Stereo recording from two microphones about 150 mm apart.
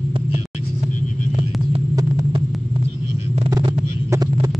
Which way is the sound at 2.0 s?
25° right (ahead or behind).